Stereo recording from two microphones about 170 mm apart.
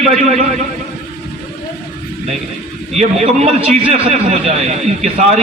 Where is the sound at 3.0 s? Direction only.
40° right (ahead or behind).